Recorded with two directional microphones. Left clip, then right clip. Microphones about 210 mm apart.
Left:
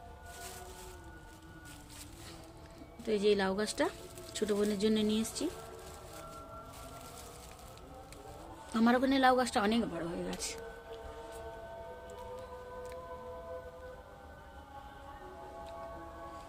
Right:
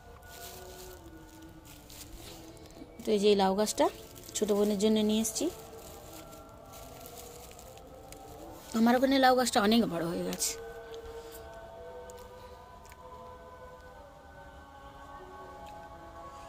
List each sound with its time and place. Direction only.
3.0 s speech: 15° right (ahead or behind)
8.7 s a woman's voice: 15° right (ahead or behind); by 10.2 s 30° right (ahead or behind)
10.2 s music: 20° right (ahead or behind)